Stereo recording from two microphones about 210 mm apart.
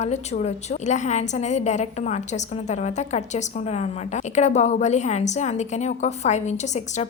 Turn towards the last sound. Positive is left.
turn(degrees=35)  # may be behind; listen again after turning